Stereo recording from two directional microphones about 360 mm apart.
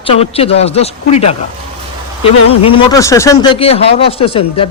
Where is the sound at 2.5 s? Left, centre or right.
Centre.